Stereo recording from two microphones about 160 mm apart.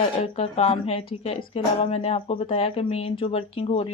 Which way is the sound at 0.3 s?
40° left (ahead or behind).